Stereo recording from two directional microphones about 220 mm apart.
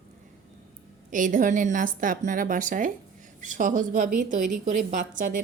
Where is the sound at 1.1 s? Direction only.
35° right (ahead or behind).